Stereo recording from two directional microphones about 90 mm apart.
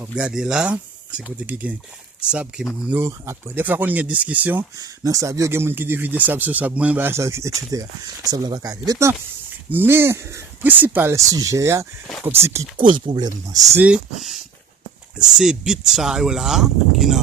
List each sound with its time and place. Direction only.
0.2 s speech: 10° right (ahead or behind)
3.1 s speech: 30° right (ahead or behind)
3.5 s speech: 20° right (ahead or behind)
4.8 s speech: 40° right (ahead or behind)
5.5 s speech: 25° right (ahead or behind)
9.6 s speech: 25° right (ahead or behind)
11.2 s speech: 40° right (ahead or behind)
12.7 s speech: 65° right (ahead or behind); by 13.7 s 45° right (ahead or behind)
14.2 s speech: centre (ahead or behind)